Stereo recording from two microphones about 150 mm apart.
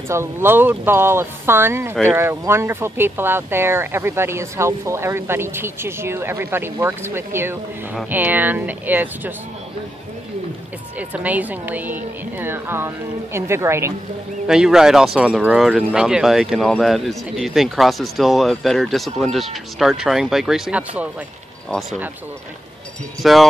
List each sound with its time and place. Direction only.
0.1 s speech: 15° right (ahead or behind)
11.0 s speech: 10° right (ahead or behind)
14.5 s speech: 5° right (ahead or behind)
23.2 s speech: centre (ahead or behind)